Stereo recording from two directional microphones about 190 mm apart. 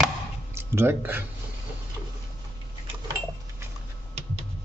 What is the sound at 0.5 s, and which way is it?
Speech, 10° right (ahead or behind).